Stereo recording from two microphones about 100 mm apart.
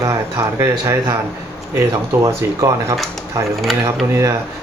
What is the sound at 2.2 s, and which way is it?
Speech, 35° right (ahead or behind).